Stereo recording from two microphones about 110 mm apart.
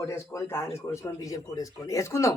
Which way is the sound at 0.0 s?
25° left (ahead or behind).